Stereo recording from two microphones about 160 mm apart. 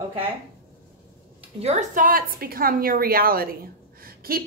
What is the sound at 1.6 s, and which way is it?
A woman's voice, 50° right (ahead or behind).